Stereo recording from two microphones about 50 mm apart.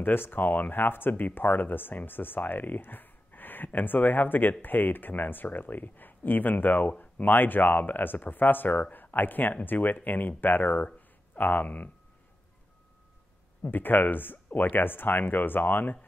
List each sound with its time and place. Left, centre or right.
0.0 s speech: left
11.0 s a sound: left
13.6 s speech: left